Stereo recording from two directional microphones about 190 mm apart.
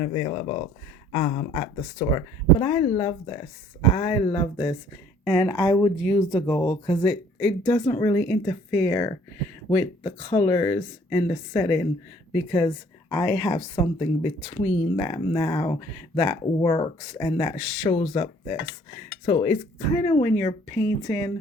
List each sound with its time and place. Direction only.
0.0 s speech: 30° left (ahead or behind)
19.2 s speech: 35° left (ahead or behind)
20.2 s speech: 20° left (ahead or behind)